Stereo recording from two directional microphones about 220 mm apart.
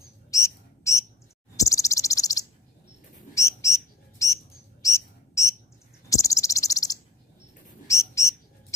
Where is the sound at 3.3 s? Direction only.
15° left (ahead or behind).